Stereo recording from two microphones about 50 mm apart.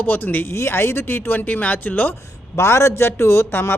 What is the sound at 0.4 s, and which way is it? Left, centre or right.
Speech, left.